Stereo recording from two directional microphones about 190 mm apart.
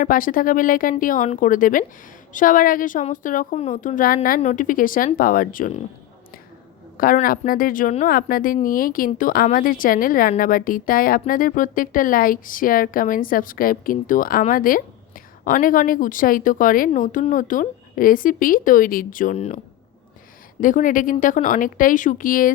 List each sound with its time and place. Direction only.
0.0 s a woman's voice: 45° left (ahead or behind)
6.9 s a woman's voice: 45° left (ahead or behind)
20.6 s a woman's voice: 45° left (ahead or behind)